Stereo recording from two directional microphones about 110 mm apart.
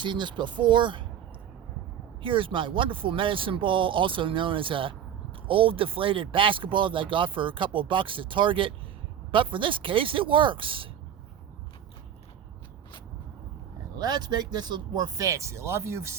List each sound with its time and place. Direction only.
0.0 s speech: 45° right (ahead or behind)
2.2 s speech: 50° right (ahead or behind)
13.9 s speech: 40° right (ahead or behind)